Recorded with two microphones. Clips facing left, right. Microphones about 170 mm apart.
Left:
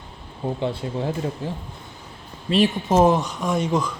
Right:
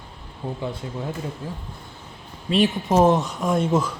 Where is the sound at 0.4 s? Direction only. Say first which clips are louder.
Left 4 dB; 25° left (ahead or behind).